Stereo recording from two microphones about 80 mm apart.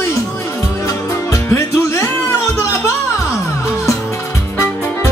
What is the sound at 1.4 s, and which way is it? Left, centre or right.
Music, left.